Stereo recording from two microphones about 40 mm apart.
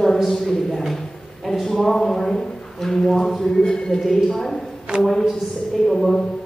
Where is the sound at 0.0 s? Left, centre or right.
Centre.